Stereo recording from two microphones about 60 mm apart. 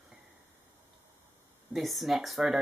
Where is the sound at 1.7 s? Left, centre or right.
Centre.